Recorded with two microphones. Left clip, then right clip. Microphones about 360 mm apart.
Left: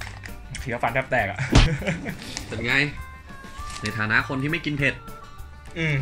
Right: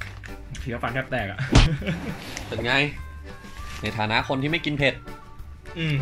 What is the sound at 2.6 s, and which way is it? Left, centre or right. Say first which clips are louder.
Speech: even; centre.